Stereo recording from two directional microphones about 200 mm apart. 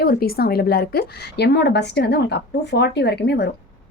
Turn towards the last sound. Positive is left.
turn(degrees=55)  # may be behind; listen again after turning